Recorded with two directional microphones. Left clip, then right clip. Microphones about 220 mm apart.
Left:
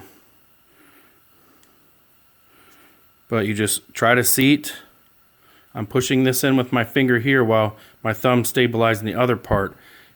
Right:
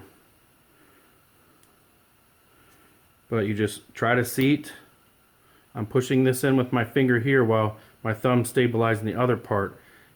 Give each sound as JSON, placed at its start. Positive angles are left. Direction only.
{"t": 3.2, "sound": "speech", "side_deg": 45}